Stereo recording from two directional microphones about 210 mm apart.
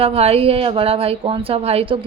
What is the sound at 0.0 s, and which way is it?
Speech, 30° right (ahead or behind).